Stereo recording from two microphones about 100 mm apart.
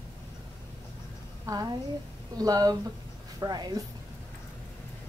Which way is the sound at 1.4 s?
40° right (ahead or behind).